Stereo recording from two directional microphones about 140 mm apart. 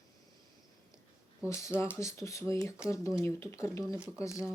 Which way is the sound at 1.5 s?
20° left (ahead or behind).